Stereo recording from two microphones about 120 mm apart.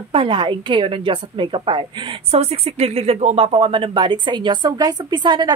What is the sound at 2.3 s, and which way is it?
A woman's voice, 60° right (ahead or behind).